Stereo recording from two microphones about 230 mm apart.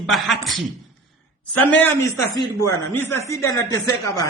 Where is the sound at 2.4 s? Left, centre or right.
Centre.